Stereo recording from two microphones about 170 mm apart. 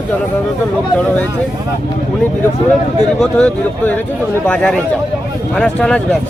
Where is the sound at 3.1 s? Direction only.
5° left (ahead or behind).